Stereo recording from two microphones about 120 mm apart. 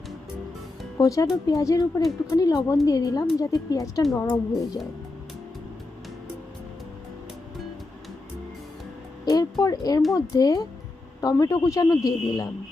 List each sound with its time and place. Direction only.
0.9 s a woman's voice: 30° left (ahead or behind)
9.2 s a sound: 30° left (ahead or behind)
10.2 s a man's voice: 30° left (ahead or behind)